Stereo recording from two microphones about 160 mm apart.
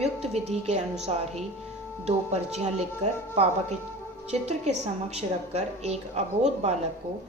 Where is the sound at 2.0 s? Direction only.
45° right (ahead or behind).